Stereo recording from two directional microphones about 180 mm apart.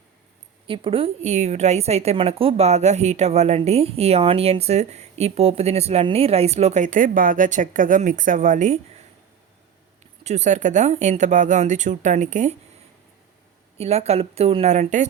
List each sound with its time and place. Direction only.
0.7 s a woman's voice: 30° right (ahead or behind)
10.2 s a woman's voice: 40° right (ahead or behind)
13.7 s a woman's voice: 35° right (ahead or behind)